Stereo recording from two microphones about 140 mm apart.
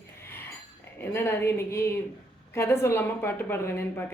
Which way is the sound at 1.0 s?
15° left (ahead or behind).